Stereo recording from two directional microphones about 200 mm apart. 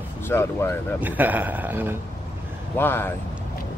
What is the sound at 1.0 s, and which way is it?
A man's voice, 10° right (ahead or behind).